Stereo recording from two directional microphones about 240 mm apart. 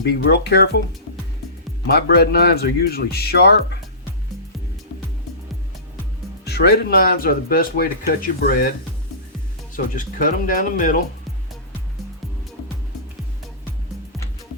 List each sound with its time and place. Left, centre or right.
0.0 s speech: left
1.9 s speech: left
6.4 s speech: left
9.7 s speech: left